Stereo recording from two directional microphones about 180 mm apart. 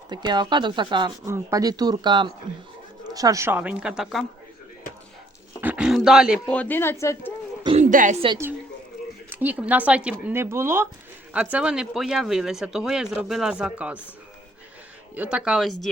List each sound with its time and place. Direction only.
0.1 s speech: 25° right (ahead or behind); by 4.3 s centre (ahead or behind)
5.5 s speech: 10° right (ahead or behind)
6.5 s speech: 10° left (ahead or behind)
7.8 s a sound: 45° right (ahead or behind)
9.3 s speech: 10° right (ahead or behind)
15.1 s speech: 5° right (ahead or behind)